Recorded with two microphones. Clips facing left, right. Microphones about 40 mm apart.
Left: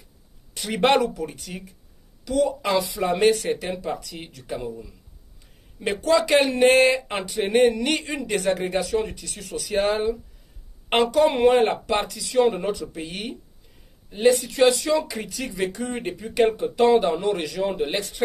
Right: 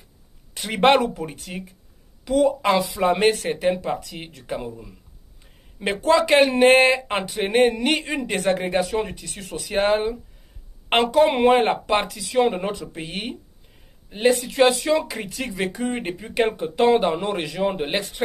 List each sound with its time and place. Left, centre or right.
0.7 s speech: right
5.8 s speech: right